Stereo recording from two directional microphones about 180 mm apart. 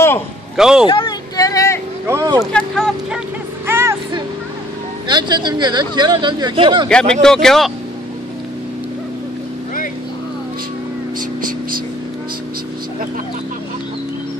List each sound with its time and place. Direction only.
0.6 s speech: 5° right (ahead or behind)
0.8 s a sound: 25° left (ahead or behind)
2.0 s speech: 15° right (ahead or behind)
2.5 s speech: centre (ahead or behind)
3.6 s vehicle: 15° right (ahead or behind)
5.0 s speech: 25° right (ahead or behind)
6.9 s speech: 5° left (ahead or behind)